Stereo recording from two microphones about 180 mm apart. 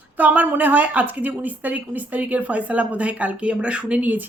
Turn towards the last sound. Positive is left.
turn(degrees=-10)  # may be behind; listen again after turning